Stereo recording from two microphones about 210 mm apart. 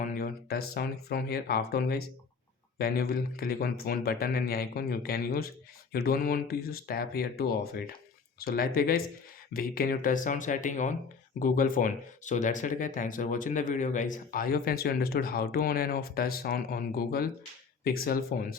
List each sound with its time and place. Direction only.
0.0 s speech: 40° left (ahead or behind)